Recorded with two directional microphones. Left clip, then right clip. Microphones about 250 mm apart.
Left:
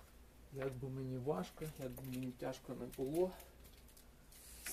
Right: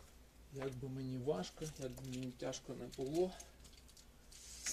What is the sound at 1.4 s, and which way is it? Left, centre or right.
Speech, centre.